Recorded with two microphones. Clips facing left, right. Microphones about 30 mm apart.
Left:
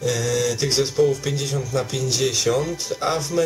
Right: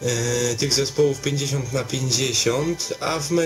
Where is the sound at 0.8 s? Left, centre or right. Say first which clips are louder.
Left 1 dB; centre.